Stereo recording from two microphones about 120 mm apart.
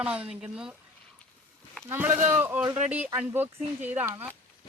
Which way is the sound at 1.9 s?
15° right (ahead or behind).